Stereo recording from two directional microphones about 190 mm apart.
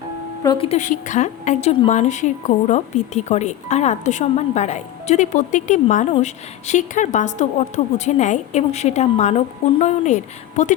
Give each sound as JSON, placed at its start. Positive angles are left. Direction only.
{"t": 0.4, "sound": "speech", "side_deg": 30}